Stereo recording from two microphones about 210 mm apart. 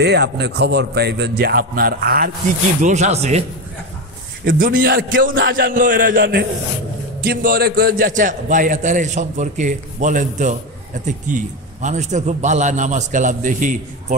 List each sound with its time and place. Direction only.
0.0 s a man's voice: 50° right (ahead or behind)
2.8 s a man's voice: 35° right (ahead or behind)
4.5 s a man's voice: 45° right (ahead or behind)